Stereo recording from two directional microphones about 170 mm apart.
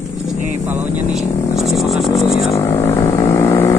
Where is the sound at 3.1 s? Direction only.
20° left (ahead or behind).